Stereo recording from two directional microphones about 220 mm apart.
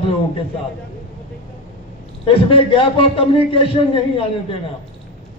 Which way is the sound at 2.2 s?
25° left (ahead or behind).